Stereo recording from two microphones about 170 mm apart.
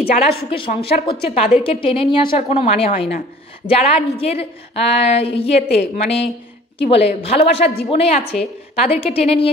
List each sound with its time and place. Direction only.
0.0 s a woman's voice: 65° left (ahead or behind)
0.5 s a woman's voice: 35° left (ahead or behind)